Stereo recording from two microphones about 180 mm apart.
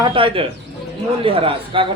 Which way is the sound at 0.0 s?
30° right (ahead or behind).